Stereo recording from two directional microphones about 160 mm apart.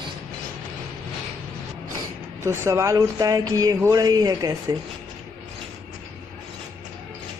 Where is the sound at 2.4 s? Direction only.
15° right (ahead or behind).